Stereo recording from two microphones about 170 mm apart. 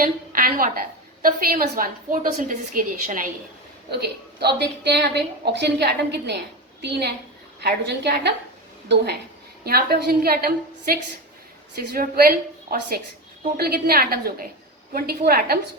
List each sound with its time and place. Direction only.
0.0 s a woman's voice: 55° right (ahead or behind)
3.8 s a woman's voice: 70° right (ahead or behind)
8.9 s a woman's voice: 90° right
9.6 s a woman's voice: 65° right (ahead or behind)